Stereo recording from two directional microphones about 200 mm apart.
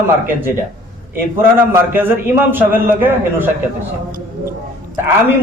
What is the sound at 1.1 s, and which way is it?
A man's voice, 10° right (ahead or behind).